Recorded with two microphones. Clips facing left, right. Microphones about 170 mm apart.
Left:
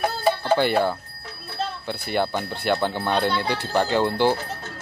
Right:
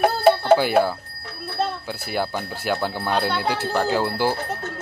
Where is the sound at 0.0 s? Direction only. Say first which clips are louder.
Right 6 dB; 70° right (ahead or behind).